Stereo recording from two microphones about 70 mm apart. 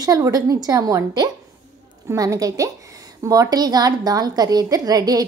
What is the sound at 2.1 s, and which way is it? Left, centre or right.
Speech, right.